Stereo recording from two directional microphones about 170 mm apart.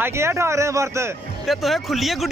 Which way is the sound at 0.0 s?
15° right (ahead or behind).